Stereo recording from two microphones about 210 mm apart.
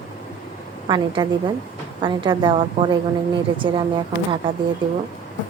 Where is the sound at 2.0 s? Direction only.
20° right (ahead or behind).